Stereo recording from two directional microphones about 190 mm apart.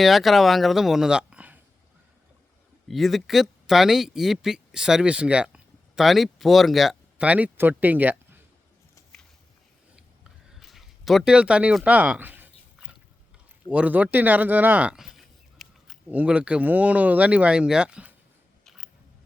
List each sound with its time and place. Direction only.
0.0 s speech: centre (ahead or behind)
2.9 s speech: centre (ahead or behind)
10.5 s a sound: centre (ahead or behind)
13.7 s speech: 5° right (ahead or behind)